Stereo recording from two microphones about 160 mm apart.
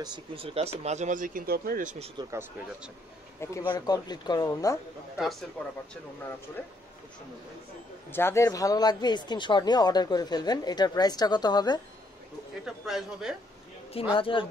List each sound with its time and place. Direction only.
0.0 s speech: 25° right (ahead or behind)
0.6 s speech: 45° right (ahead or behind)
3.3 s a man's voice: 20° left (ahead or behind)
5.1 s a man's voice: centre (ahead or behind)
8.1 s speech: 15° left (ahead or behind)
12.6 s a man's voice: 5° right (ahead or behind)
14.1 s speech: 35° left (ahead or behind)